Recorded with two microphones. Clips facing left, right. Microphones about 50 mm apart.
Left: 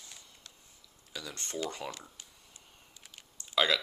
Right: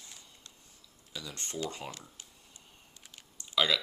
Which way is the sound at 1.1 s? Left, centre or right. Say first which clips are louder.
Left 1 dB; left.